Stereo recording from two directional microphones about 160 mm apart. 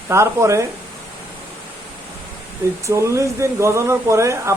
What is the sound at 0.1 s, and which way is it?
Speech, 15° right (ahead or behind).